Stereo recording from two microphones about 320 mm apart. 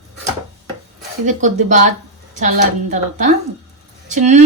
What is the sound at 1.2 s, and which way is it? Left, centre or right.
Speech, right.